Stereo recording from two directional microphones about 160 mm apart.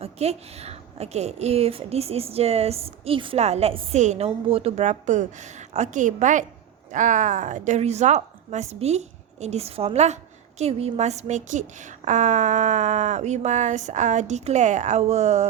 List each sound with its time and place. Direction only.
0.0 s a woman's voice: 40° right (ahead or behind)